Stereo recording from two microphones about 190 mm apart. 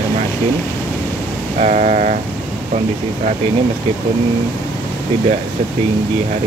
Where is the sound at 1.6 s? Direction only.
40° right (ahead or behind).